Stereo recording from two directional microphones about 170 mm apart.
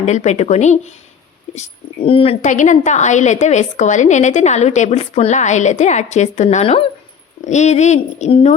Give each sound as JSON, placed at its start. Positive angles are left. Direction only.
{"t": 0.0, "sound": "speech", "side_deg": 40}